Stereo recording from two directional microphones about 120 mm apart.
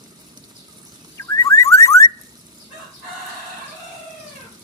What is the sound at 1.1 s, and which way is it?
Car alarm, 25° left (ahead or behind).